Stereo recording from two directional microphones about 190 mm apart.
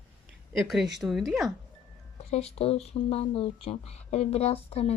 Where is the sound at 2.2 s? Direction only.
35° left (ahead or behind).